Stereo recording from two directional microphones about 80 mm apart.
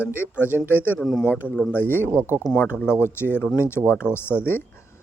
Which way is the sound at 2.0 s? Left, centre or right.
Right.